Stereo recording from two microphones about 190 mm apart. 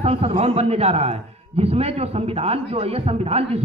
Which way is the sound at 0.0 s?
30° right (ahead or behind).